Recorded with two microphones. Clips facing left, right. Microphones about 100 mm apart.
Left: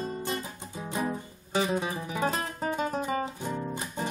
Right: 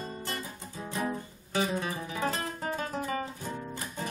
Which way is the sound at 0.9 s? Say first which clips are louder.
Left 2 dB; 20° left (ahead or behind).